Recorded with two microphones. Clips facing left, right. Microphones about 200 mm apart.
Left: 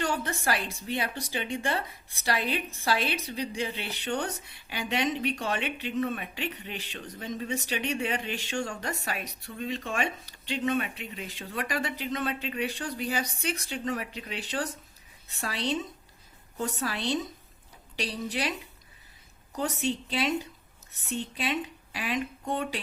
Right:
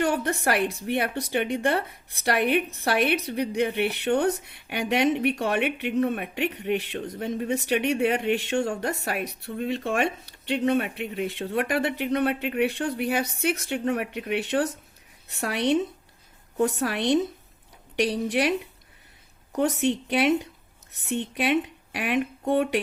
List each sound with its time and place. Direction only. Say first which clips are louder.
0.0 s speech: right 6 dB; 60° right (ahead or behind)